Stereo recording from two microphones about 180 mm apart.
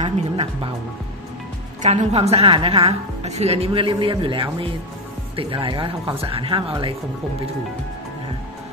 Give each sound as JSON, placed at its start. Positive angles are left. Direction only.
{"t": 0.0, "sound": "a woman's voice", "side_deg": -30}
{"t": 1.8, "sound": "a woman's voice", "side_deg": -40}